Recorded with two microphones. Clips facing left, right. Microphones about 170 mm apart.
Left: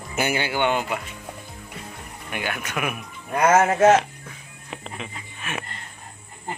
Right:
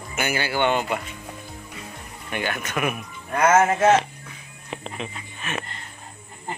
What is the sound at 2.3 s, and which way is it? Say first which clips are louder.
Speech: right 2 dB; 5° left (ahead or behind).